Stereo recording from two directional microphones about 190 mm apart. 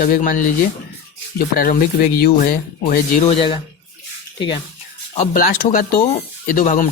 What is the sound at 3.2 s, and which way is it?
Speech, 30° left (ahead or behind).